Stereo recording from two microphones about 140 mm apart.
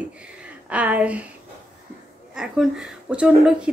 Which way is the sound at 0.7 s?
10° right (ahead or behind).